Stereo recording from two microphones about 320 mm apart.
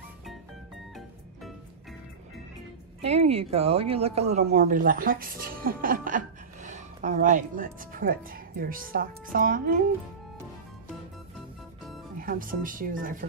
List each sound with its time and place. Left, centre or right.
3.0 s speech: centre
12.2 s speech: right